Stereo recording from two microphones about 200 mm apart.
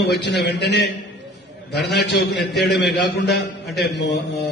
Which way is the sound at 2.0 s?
60° left (ahead or behind).